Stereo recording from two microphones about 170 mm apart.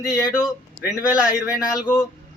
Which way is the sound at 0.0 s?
20° left (ahead or behind).